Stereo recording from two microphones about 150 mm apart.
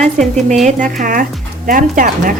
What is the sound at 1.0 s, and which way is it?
Speech, 65° right (ahead or behind).